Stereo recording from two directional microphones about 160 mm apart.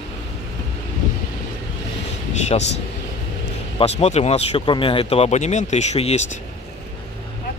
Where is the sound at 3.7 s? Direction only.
40° left (ahead or behind).